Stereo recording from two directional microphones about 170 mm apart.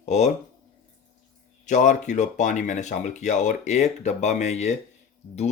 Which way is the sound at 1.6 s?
45° left (ahead or behind).